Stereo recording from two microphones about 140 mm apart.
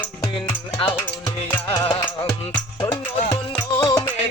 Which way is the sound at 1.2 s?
35° left (ahead or behind).